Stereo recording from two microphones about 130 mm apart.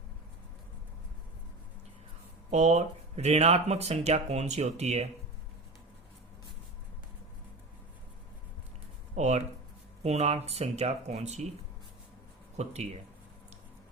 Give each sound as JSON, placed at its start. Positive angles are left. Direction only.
{"t": 2.5, "sound": "speech", "side_deg": -60}
{"t": 9.1, "sound": "speech", "side_deg": -60}
{"t": 12.5, "sound": "speech", "side_deg": -55}